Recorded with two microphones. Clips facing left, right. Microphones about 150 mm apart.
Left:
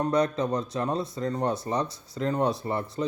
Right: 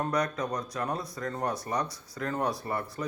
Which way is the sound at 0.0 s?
25° left (ahead or behind).